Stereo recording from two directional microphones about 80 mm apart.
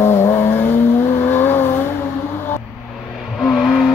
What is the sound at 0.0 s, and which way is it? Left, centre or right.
Vehicle, left.